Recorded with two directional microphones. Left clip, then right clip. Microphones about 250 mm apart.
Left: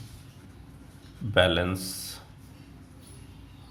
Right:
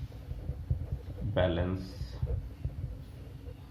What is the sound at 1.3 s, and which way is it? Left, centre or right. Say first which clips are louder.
Speech: left 8 dB; left.